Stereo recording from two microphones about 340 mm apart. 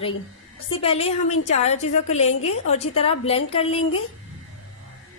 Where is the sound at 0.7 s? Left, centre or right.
Centre.